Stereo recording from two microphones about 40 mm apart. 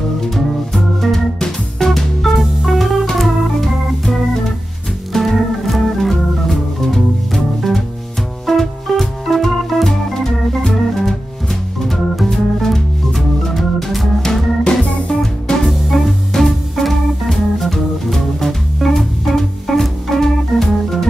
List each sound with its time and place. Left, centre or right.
0.3 s organ: centre
2.4 s music: centre
3.2 s organ: centre
8.5 s music: centre
10.6 s organ: centre
14.6 s music: left
15.7 s music: centre
16.3 s organ: centre